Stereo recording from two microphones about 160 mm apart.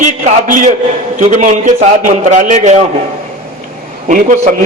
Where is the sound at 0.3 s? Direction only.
55° right (ahead or behind).